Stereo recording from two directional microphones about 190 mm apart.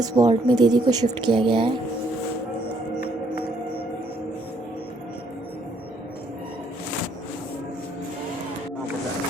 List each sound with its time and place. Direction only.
0.0 s speech: 20° right (ahead or behind)